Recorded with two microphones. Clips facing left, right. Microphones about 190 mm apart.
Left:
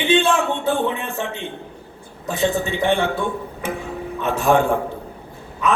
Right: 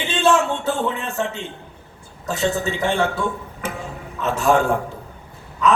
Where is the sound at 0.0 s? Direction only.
55° left (ahead or behind).